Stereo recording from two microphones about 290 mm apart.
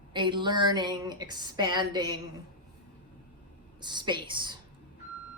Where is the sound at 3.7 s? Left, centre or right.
Centre.